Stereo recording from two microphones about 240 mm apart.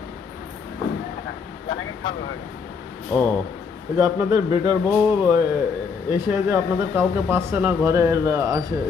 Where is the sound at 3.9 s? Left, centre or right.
Centre.